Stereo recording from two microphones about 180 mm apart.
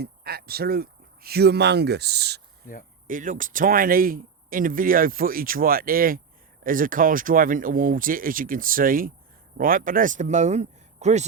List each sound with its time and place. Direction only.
0.0 s speech: 60° right (ahead or behind)
3.1 s speech: 45° right (ahead or behind)